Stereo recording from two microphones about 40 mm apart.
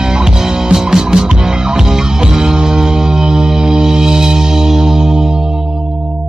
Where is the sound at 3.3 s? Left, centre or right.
Centre.